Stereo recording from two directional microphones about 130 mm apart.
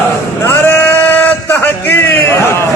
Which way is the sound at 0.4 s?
15° left (ahead or behind).